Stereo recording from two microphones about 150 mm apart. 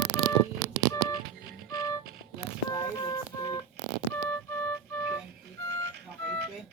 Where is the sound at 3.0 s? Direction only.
25° left (ahead or behind).